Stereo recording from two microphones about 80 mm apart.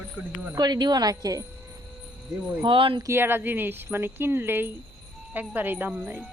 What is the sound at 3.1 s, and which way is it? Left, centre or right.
Speech, right.